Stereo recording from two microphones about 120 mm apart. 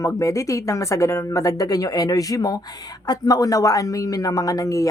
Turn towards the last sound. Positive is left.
turn(degrees=25)  # may be behind; listen again after turning